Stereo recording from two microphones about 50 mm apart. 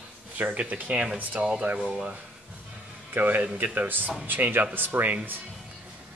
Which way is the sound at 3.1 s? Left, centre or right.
Right.